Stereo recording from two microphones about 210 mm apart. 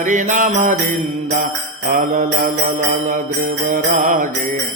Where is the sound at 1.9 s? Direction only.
40° right (ahead or behind).